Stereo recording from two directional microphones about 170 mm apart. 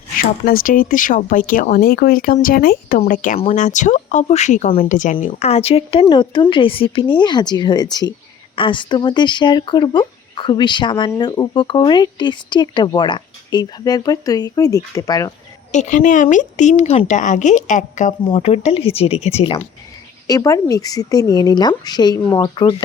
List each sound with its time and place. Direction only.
0.4 s speech: 55° left (ahead or behind); by 15.3 s 20° left (ahead or behind)
15.7 s speech: 45° left (ahead or behind)
18.3 s speech: 35° left (ahead or behind)
20.2 s speech: 20° left (ahead or behind)